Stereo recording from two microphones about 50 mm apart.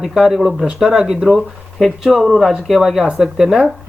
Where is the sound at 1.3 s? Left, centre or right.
Centre.